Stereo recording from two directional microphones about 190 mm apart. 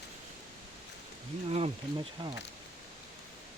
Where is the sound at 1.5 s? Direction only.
35° right (ahead or behind).